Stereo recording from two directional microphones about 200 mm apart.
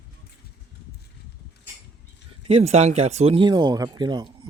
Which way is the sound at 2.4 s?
30° right (ahead or behind).